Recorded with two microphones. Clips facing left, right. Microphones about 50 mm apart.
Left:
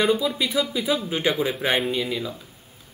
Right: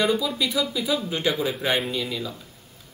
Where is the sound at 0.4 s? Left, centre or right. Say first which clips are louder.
Left 1 dB; left.